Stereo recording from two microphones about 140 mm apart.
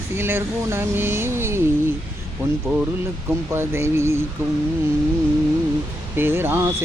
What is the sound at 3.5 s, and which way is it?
Speech, 20° right (ahead or behind).